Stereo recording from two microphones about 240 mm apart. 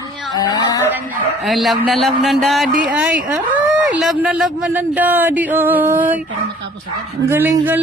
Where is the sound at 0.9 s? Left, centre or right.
Centre.